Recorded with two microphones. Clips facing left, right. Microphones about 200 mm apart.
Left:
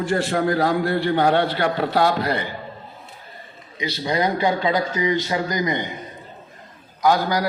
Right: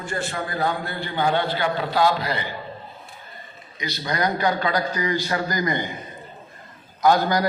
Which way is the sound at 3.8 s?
30° left (ahead or behind).